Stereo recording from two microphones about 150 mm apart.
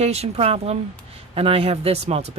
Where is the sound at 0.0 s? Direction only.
45° right (ahead or behind).